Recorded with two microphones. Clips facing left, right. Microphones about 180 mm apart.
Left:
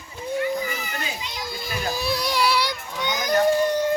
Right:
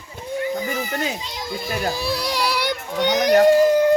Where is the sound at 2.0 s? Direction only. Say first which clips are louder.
Right 1 dB; 30° right (ahead or behind).